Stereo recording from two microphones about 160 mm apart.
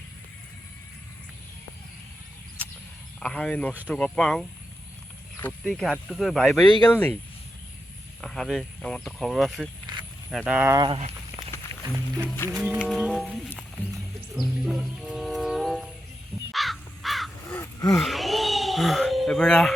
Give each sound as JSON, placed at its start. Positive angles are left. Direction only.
{"t": 3.2, "sound": "speech", "side_deg": 5}
{"t": 8.2, "sound": "speech", "side_deg": 0}
{"t": 10.8, "sound": "speech", "side_deg": -30}
{"t": 11.7, "sound": "music", "side_deg": -30}
{"t": 12.2, "sound": "speech", "side_deg": 10}
{"t": 12.5, "sound": "music", "side_deg": -5}
{"t": 16.5, "sound": "crow", "side_deg": 0}
{"t": 17.5, "sound": "a sound", "side_deg": 20}
{"t": 18.0, "sound": "a sound", "side_deg": 0}